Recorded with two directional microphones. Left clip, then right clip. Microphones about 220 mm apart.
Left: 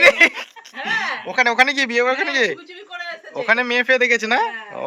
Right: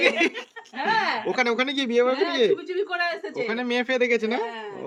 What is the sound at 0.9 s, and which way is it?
Speech, 5° right (ahead or behind).